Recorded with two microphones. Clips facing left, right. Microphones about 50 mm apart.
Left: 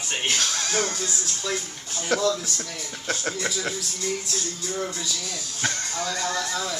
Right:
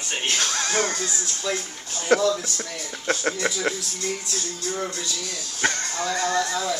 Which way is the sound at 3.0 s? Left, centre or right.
Right.